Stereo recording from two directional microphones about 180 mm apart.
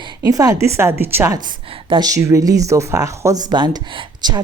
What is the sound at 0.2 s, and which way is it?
Speech, 20° right (ahead or behind).